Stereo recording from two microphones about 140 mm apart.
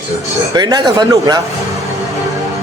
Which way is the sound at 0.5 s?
30° right (ahead or behind).